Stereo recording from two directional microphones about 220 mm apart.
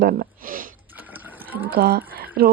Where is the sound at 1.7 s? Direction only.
45° right (ahead or behind).